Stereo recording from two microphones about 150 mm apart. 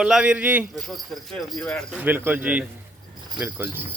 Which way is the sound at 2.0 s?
10° right (ahead or behind).